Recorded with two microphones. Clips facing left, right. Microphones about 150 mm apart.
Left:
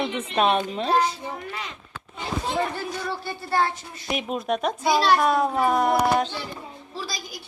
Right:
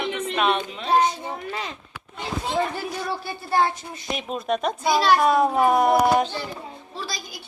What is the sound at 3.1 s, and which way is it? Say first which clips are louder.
Speech: right 1 dB; 15° right (ahead or behind).